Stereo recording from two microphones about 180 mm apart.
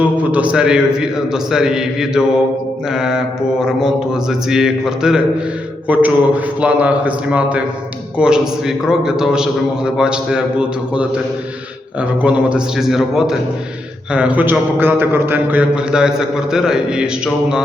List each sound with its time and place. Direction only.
0.0 s a man's voice: 10° right (ahead or behind)